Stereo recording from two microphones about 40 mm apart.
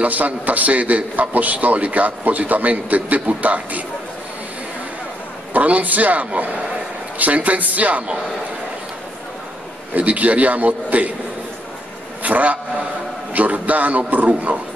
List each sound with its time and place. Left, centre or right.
0.0 s a man's voice: right
5.5 s a man's voice: right
9.9 s a man's voice: right
12.2 s a man's voice: right